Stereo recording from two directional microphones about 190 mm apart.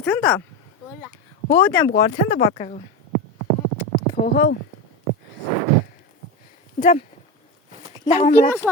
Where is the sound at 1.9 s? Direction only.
55° left (ahead or behind).